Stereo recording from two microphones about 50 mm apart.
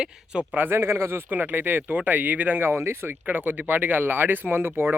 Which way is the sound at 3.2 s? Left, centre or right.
Right.